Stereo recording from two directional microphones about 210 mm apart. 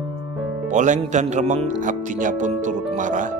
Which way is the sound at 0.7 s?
35° right (ahead or behind).